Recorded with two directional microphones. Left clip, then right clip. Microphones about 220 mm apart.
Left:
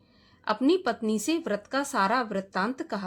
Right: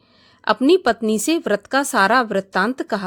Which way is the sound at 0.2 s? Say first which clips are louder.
Right 9 dB; 35° right (ahead or behind).